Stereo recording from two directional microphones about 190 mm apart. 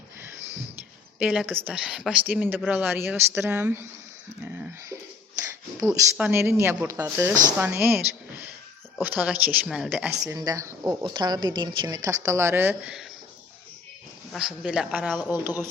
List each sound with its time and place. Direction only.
1.2 s speech: 5° right (ahead or behind)
6.1 s speech: 10° right (ahead or behind)
10.2 s a woman's voice: 20° right (ahead or behind)
14.3 s speech: 5° right (ahead or behind)
15.3 s speech: 10° right (ahead or behind)